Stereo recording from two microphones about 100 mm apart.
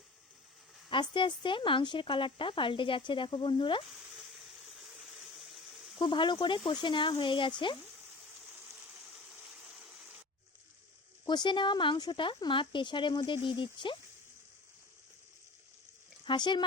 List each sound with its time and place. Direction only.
0.9 s speech: 55° left (ahead or behind)
3.9 s water: 5° right (ahead or behind)
6.0 s speech: 55° left (ahead or behind)
8.9 s a sound: 5° right (ahead or behind)
11.3 s speech: 50° left (ahead or behind)
16.2 s speech: 50° left (ahead or behind)